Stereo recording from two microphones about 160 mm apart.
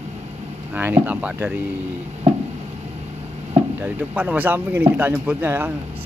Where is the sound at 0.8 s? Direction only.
10° right (ahead or behind).